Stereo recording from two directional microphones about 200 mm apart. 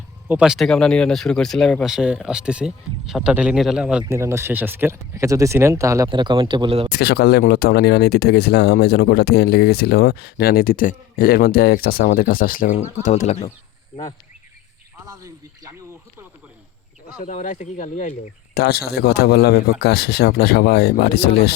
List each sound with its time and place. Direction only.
0.3 s speech: 5° right (ahead or behind); by 6.8 s 25° right (ahead or behind)
6.9 s speech: 50° left (ahead or behind); by 13.5 s 35° left (ahead or behind)
15.0 s a sound: 15° right (ahead or behind)
17.2 s speech: 40° left (ahead or behind)
18.5 s speech: 55° left (ahead or behind)